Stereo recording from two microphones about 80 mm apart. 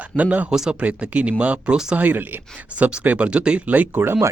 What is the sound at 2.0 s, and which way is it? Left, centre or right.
Speech, right.